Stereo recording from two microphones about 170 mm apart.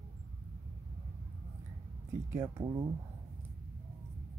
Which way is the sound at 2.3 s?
15° right (ahead or behind).